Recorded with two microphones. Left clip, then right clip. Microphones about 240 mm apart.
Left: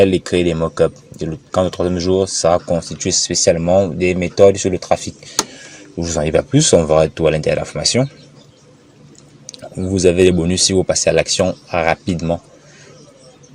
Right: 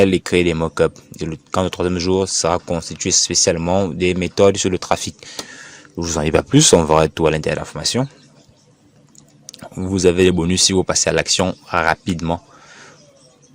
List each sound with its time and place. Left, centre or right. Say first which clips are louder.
0.0 s speech: left 1 dB; right
9.6 s speech: left 2 dB; right